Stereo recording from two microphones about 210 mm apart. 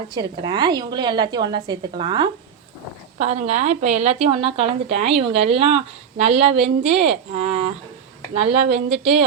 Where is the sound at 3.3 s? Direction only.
30° right (ahead or behind).